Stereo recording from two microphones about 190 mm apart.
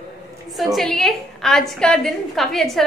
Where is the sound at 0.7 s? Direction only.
Centre (ahead or behind).